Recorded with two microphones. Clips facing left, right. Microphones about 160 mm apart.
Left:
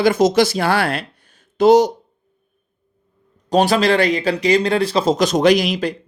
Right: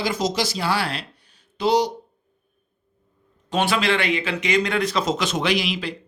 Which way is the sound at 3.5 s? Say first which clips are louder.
Left 7 dB; 40° left (ahead or behind).